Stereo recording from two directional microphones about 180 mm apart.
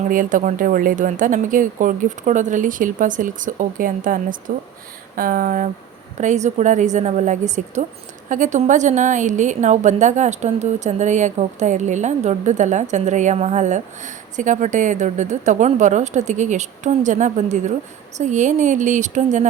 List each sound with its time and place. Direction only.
0.1 s a woman's voice: 45° right (ahead or behind)